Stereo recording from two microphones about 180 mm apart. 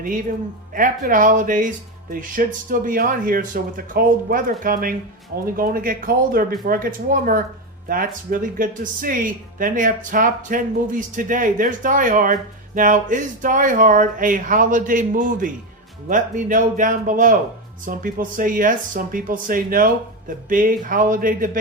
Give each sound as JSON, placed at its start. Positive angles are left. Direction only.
{"t": 0.0, "sound": "speech", "side_deg": -50}